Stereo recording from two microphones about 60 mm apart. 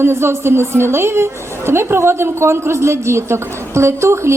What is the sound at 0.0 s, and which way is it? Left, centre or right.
A woman's voice, right.